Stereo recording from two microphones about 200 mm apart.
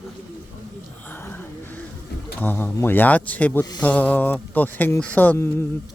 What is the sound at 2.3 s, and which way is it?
Speech, 10° left (ahead or behind).